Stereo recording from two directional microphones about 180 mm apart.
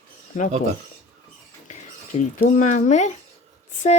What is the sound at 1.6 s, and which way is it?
A child's voice, 40° left (ahead or behind).